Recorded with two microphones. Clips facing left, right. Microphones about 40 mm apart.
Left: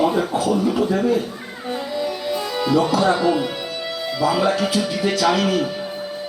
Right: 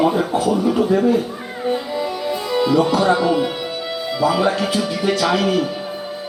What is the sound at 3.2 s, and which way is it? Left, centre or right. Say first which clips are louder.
Speech: right 2 dB; centre.